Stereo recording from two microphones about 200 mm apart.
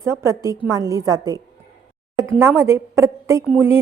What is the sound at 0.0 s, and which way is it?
A woman's voice, 15° right (ahead or behind).